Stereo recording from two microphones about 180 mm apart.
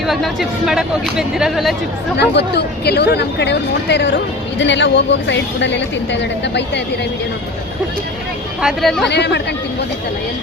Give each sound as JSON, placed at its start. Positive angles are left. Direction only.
{"t": 0.0, "sound": "speech", "side_deg": 0}
{"t": 2.1, "sound": "speech", "side_deg": 70}
{"t": 4.5, "sound": "a woman's voice", "side_deg": 85}
{"t": 8.6, "sound": "speech", "side_deg": 0}
{"t": 9.0, "sound": "speech", "side_deg": 70}